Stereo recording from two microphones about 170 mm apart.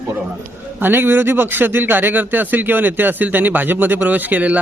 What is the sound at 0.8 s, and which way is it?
Speech, 10° right (ahead or behind).